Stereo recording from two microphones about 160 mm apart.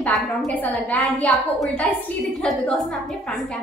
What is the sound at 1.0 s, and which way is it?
Speech, 5° left (ahead or behind).